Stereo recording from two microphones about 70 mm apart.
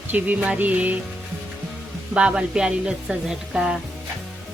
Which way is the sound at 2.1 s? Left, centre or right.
Centre.